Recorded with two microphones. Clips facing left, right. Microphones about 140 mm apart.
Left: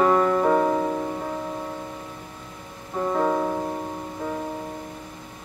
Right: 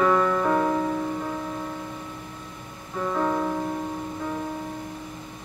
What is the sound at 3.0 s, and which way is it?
Music, 25° left (ahead or behind).